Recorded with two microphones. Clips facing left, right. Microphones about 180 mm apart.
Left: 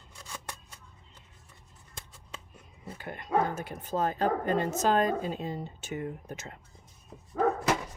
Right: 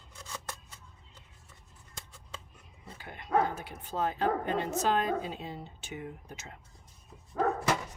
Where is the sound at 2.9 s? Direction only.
50° left (ahead or behind).